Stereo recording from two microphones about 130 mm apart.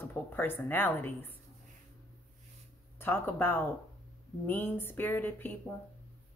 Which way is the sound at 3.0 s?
15° left (ahead or behind).